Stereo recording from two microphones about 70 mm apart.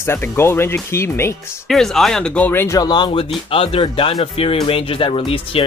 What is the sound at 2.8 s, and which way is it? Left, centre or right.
Speech, left.